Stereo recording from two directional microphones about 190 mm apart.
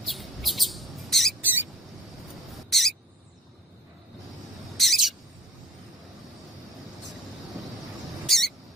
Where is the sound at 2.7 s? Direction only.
Centre (ahead or behind).